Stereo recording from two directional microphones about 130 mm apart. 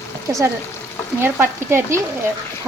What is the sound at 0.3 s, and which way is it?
Frying, 25° right (ahead or behind).